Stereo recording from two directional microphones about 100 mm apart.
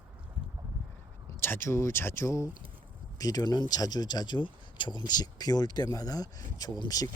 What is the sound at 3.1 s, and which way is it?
Speech, 40° left (ahead or behind).